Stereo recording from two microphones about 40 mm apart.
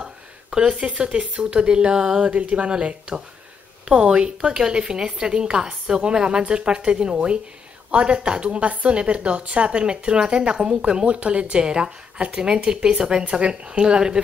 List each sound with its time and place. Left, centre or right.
0.0 s speech: right
2.3 s a woman's voice: right